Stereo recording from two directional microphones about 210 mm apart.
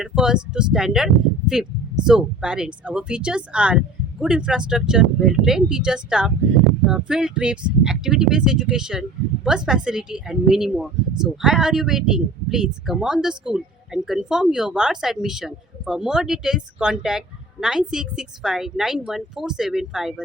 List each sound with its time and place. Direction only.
0.0 s speech: 5° right (ahead or behind)